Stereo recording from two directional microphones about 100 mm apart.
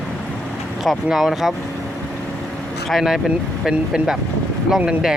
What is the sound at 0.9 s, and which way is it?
Speech, centre (ahead or behind).